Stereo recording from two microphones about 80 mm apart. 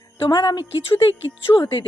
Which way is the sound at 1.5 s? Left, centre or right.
Left.